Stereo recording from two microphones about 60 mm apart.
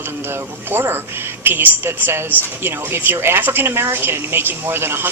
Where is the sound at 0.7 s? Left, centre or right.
Right.